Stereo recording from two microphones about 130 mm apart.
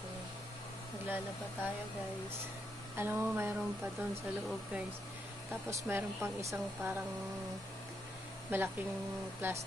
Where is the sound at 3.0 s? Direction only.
15° right (ahead or behind).